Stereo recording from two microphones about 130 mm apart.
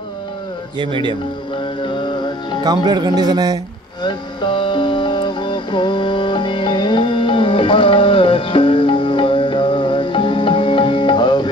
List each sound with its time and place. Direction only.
0.7 s speech: 40° right (ahead or behind)
1.8 s music: 40° left (ahead or behind)
2.6 s speech: 35° right (ahead or behind)
4.0 s music: 35° left (ahead or behind)